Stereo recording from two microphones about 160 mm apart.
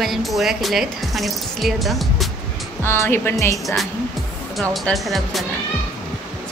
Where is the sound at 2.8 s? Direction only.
15° left (ahead or behind).